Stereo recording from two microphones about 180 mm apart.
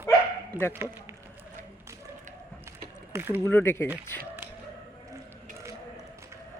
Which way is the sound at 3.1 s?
10° right (ahead or behind).